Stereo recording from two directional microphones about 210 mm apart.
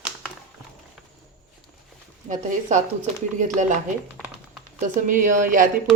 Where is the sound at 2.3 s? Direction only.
35° right (ahead or behind).